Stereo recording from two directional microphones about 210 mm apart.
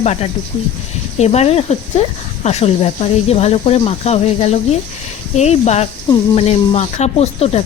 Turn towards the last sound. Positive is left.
turn(degrees=30)  # may be behind; listen again after turning